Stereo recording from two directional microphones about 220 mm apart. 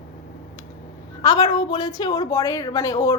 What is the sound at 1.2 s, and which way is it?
A woman's voice, 20° left (ahead or behind).